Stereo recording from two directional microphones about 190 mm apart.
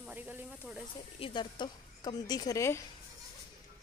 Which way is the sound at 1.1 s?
25° left (ahead or behind).